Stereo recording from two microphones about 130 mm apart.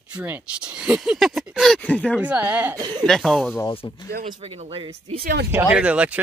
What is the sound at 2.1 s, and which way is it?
Speech, 10° right (ahead or behind).